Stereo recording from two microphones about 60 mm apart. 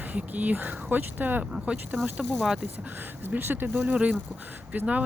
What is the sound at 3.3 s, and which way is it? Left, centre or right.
Speech, right.